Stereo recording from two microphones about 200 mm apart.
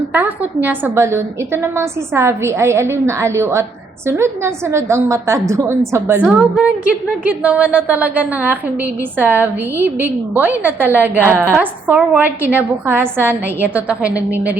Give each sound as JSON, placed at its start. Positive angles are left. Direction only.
{"t": 0.1, "sound": "a woman's voice", "side_deg": -10}